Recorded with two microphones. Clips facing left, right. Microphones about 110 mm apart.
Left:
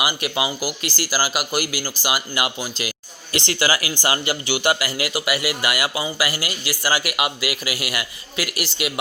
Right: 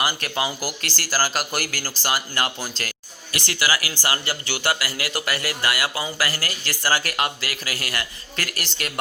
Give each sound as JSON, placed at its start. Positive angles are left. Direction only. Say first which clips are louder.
{"t": 0.0, "sound": "speech", "louder": "left 2 dB", "side_deg": 10}
{"t": 2.6, "sound": "a man's voice", "louder": "left 3 dB", "side_deg": -5}
{"t": 3.3, "sound": "speech", "louder": "left 3 dB", "side_deg": 25}